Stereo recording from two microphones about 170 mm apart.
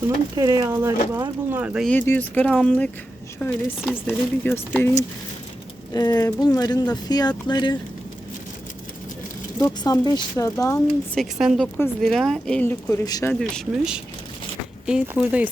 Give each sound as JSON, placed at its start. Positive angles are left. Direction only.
{"t": 0.3, "sound": "speech", "side_deg": -20}
{"t": 1.9, "sound": "speech", "side_deg": 10}
{"t": 5.9, "sound": "speech", "side_deg": 20}
{"t": 9.6, "sound": "speech", "side_deg": 20}
{"t": 10.8, "sound": "speech", "side_deg": 5}
{"t": 13.4, "sound": "speech", "side_deg": 0}